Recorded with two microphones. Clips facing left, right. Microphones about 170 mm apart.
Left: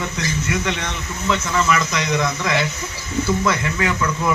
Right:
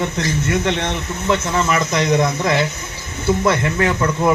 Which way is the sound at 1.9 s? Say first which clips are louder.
Right 5 dB; 50° right (ahead or behind).